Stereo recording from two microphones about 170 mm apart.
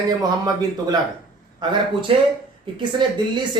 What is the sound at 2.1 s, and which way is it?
A man's voice, 35° right (ahead or behind).